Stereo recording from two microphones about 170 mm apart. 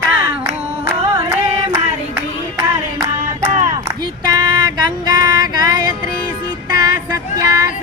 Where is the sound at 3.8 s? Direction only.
20° right (ahead or behind).